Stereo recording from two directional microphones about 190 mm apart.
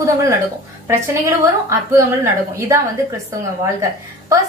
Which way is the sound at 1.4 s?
15° right (ahead or behind).